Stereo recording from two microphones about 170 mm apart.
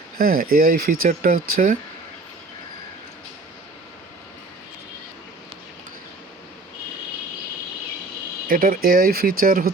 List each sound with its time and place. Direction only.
0.2 s speech: 60° right (ahead or behind)
8.4 s speech: 60° right (ahead or behind)